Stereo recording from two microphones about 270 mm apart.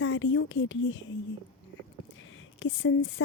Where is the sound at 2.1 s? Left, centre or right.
Left.